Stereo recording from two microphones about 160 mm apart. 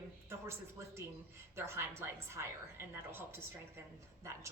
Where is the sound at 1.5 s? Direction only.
15° right (ahead or behind).